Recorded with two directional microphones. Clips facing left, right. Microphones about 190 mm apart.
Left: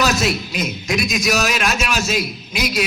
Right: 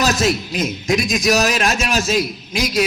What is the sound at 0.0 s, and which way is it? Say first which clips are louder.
A man's voice: right 1 dB; 35° right (ahead or behind).